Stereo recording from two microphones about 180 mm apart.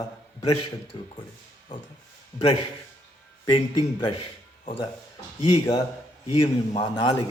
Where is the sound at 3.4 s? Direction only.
25° left (ahead or behind).